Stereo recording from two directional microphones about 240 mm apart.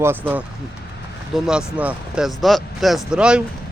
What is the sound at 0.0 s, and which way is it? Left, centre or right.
Speech, centre.